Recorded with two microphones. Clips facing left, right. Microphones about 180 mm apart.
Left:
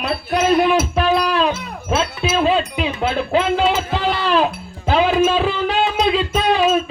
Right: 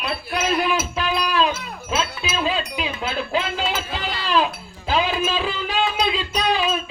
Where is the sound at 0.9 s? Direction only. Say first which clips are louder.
Left 5 dB; 55° left (ahead or behind).